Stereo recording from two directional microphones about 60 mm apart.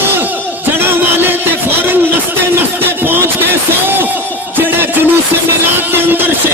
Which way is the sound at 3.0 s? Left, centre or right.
Right.